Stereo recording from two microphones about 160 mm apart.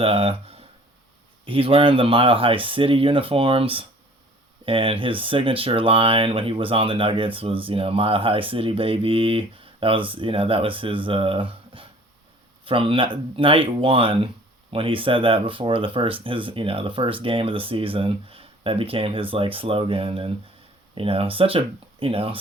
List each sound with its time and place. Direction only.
0.0 s speech: 35° right (ahead or behind)